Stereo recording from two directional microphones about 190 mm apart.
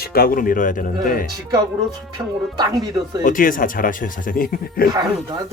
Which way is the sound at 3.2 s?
45° left (ahead or behind).